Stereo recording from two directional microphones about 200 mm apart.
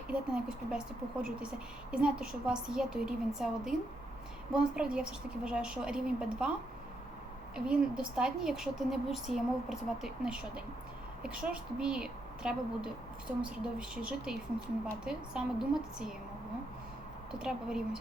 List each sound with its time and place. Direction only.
0.1 s speech: 5° right (ahead or behind)
7.5 s speech: 5° right (ahead or behind)
17.3 s speech: 5° right (ahead or behind)